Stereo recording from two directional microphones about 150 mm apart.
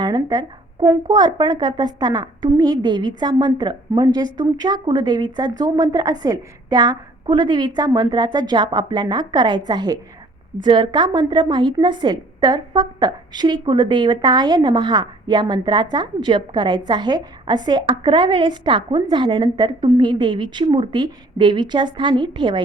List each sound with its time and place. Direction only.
0.0 s a woman's voice: 25° right (ahead or behind)